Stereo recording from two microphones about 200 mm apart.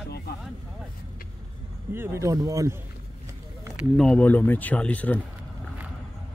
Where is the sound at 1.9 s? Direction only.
15° right (ahead or behind).